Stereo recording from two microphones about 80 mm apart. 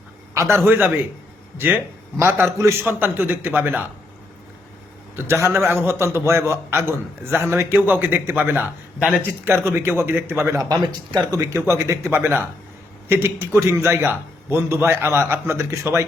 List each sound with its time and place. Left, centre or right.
0.3 s a man's voice: right
2.8 s speech: right
5.1 s a man's voice: right
7.8 s speech: right
9.0 s speech: centre
9.6 s speech: right
10.6 s speech: right
11.3 s a man's voice: right